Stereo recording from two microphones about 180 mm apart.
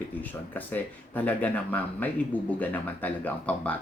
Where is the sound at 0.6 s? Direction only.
10° left (ahead or behind).